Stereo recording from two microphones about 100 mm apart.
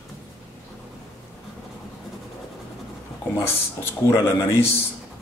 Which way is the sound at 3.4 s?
25° left (ahead or behind).